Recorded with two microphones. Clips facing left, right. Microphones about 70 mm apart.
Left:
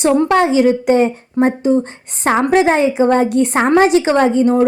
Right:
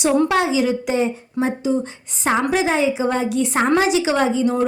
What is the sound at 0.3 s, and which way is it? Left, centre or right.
Speech, left.